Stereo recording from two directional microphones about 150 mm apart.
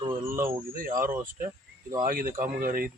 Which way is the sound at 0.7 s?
65° right (ahead or behind).